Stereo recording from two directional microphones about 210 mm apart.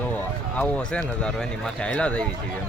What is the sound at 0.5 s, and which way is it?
Speech, 5° left (ahead or behind).